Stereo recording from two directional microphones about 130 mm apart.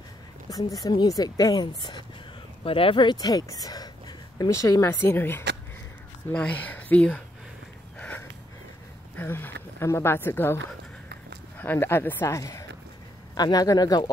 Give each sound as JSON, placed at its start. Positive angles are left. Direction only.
{"t": 0.5, "sound": "speech", "side_deg": 25}
{"t": 2.6, "sound": "speech", "side_deg": 45}
{"t": 8.0, "sound": "a sound", "side_deg": 10}
{"t": 9.1, "sound": "speech", "side_deg": 15}